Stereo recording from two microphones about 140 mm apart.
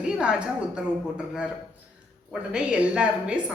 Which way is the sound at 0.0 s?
5° right (ahead or behind).